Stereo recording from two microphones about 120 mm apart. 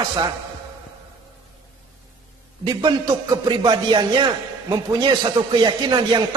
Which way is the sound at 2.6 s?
35° right (ahead or behind).